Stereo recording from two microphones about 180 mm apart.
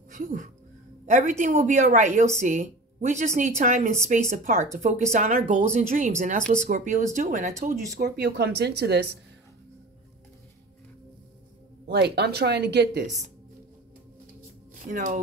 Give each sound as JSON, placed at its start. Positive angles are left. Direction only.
{"t": 0.1, "sound": "speech", "side_deg": -45}
{"t": 8.0, "sound": "speech", "side_deg": -65}
{"t": 11.9, "sound": "speech", "side_deg": -65}
{"t": 14.9, "sound": "speech", "side_deg": -40}